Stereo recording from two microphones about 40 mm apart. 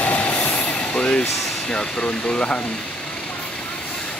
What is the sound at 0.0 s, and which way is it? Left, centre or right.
Vehicle, left.